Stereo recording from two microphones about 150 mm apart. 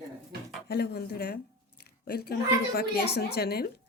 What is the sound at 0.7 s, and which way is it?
A woman's voice, 90° left.